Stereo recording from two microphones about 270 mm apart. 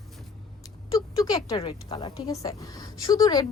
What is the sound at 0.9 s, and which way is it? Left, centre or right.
Speech, centre.